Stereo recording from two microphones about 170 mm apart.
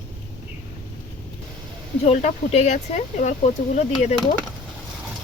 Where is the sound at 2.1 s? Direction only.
40° left (ahead or behind).